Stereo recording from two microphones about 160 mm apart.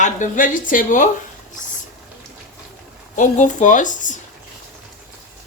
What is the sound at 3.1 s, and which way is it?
A woman's voice, 50° left (ahead or behind).